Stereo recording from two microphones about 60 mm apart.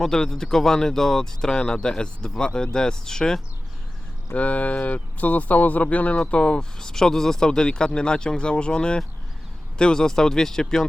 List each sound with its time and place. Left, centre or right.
0.0 s speech: centre
4.4 s speech: left